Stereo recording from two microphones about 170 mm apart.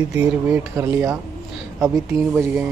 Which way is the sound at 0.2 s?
10° right (ahead or behind).